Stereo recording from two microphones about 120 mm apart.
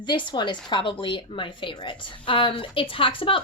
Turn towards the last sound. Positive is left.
turn(degrees=45)  # may be behind; listen again after turning